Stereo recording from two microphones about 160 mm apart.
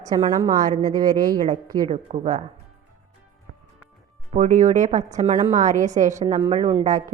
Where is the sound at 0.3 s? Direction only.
25° right (ahead or behind).